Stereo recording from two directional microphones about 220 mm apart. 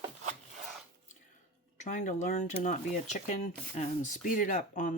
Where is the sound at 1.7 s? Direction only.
35° left (ahead or behind).